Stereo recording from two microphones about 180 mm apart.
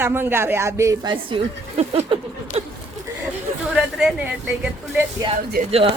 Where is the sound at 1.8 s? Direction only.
35° right (ahead or behind).